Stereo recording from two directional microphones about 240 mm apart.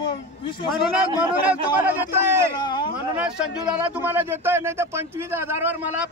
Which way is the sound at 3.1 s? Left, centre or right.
Centre.